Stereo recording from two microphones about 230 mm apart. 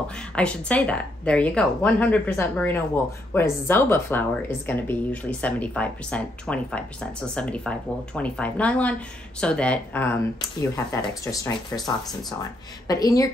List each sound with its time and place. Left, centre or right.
0.4 s speech: centre